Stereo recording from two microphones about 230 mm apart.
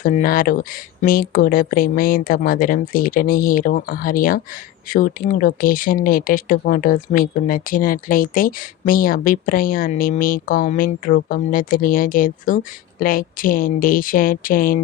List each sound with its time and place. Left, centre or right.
0.0 s speech: left